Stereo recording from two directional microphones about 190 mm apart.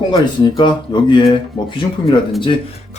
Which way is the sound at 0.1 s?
25° left (ahead or behind).